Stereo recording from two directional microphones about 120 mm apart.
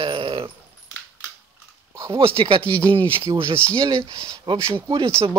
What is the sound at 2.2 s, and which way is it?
Speech, 45° right (ahead or behind).